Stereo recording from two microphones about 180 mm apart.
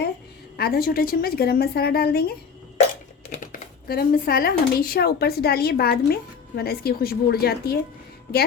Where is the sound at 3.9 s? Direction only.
55° left (ahead or behind).